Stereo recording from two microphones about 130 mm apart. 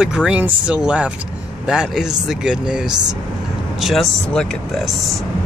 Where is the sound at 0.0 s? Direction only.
5° right (ahead or behind).